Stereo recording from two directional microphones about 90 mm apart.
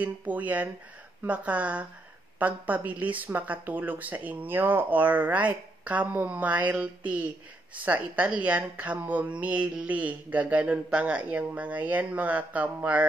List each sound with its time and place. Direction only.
0.0 s a woman's voice: 15° right (ahead or behind)